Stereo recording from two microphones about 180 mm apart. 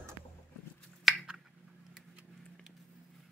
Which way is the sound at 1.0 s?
Centre (ahead or behind).